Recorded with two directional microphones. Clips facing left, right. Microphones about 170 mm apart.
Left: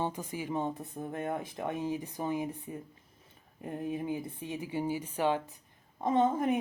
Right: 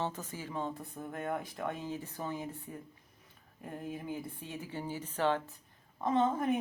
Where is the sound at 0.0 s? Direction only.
15° left (ahead or behind).